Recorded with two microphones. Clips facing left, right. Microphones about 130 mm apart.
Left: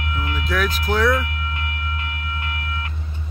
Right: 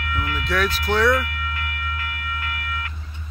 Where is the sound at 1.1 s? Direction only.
25° left (ahead or behind).